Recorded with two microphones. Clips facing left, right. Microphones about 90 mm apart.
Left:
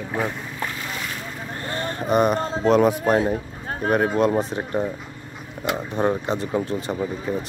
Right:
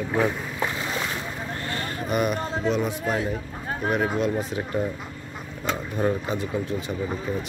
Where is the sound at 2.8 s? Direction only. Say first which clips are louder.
Left 8 dB; 50° left (ahead or behind).